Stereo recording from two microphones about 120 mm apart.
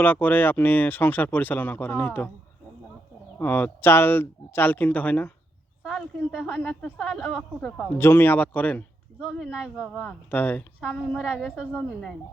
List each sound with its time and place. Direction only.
0.0 s speech: 15° left (ahead or behind)
3.3 s speech: 15° left (ahead or behind)
5.8 s a sound: 5° right (ahead or behind)
6.1 s a woman's voice: 10° left (ahead or behind)
7.9 s speech: 20° left (ahead or behind)
9.3 s a woman's voice: 5° right (ahead or behind)
10.3 s a woman's voice: 15° left (ahead or behind)